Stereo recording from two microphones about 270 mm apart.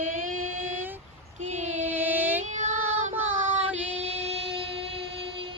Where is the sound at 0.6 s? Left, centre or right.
Centre.